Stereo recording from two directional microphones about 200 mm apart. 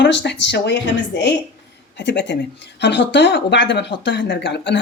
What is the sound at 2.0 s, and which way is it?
Speech, 60° left (ahead or behind).